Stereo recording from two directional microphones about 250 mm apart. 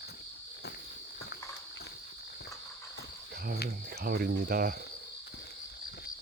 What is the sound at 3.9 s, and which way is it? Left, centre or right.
Cricket, right.